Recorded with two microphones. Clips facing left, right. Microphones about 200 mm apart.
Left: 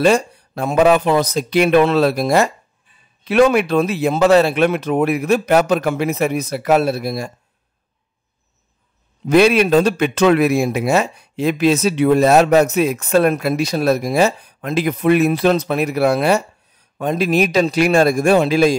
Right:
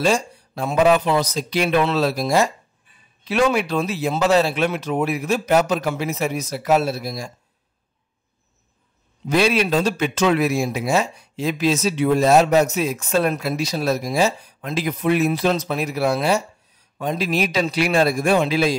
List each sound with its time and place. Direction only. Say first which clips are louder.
0.0 s a man's voice: left 5 dB; 60° left (ahead or behind)
9.3 s a man's voice: left 6 dB; 55° left (ahead or behind)